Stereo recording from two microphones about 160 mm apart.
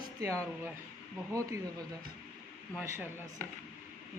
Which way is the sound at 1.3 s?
20° right (ahead or behind).